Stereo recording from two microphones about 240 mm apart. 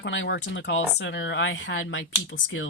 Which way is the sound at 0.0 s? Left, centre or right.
Left.